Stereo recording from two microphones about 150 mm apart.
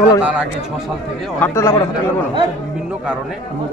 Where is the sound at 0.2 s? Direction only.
5° right (ahead or behind).